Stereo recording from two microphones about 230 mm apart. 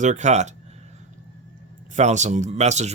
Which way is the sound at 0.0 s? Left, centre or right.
Right.